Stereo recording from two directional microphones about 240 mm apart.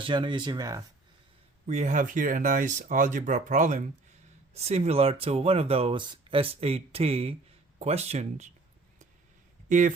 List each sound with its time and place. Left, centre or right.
0.0 s speech: centre
1.6 s speech: right
9.6 s speech: right